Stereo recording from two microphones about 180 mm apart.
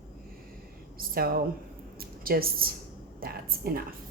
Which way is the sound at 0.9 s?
55° right (ahead or behind).